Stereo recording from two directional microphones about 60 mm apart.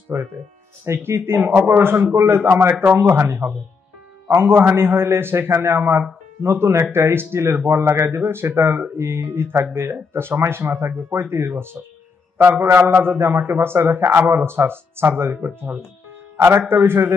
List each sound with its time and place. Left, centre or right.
0.9 s speech: right
16.3 s speech: right